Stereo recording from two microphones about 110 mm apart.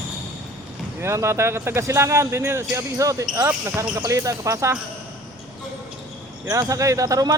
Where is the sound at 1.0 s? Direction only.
25° right (ahead or behind).